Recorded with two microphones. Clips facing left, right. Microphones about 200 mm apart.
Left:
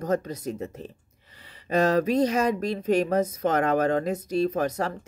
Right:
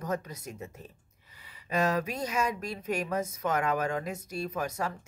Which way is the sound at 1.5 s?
35° left (ahead or behind).